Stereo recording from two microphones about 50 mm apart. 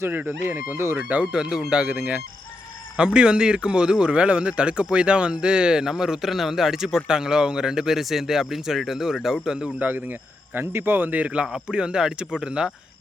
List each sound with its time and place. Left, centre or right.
0.2 s speech: right
1.2 s a man's voice: centre
9.8 s speech: right
11.2 s a man's voice: right